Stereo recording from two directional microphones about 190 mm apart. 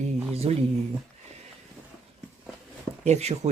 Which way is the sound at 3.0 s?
35° right (ahead or behind).